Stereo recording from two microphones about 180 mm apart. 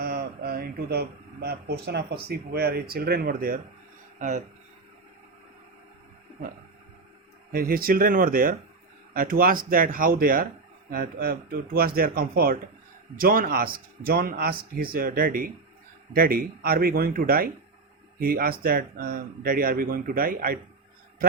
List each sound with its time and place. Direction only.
0.0 s speech: 55° right (ahead or behind)
4.2 s speech: 45° right (ahead or behind)
7.5 s speech: 55° right (ahead or behind)